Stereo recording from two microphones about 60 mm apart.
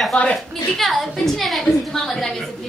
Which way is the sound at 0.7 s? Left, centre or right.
Centre.